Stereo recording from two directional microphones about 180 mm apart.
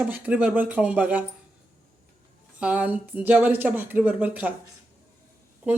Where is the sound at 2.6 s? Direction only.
10° right (ahead or behind).